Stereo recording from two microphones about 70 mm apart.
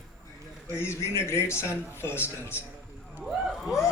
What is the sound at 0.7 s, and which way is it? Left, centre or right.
Speech, left.